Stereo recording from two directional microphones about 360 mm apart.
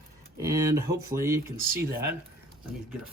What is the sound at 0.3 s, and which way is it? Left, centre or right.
Speech, centre.